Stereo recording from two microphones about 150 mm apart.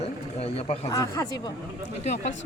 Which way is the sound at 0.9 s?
25° left (ahead or behind).